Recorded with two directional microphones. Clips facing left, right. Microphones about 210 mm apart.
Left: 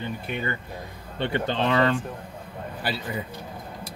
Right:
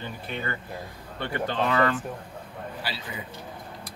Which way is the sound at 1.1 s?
25° left (ahead or behind).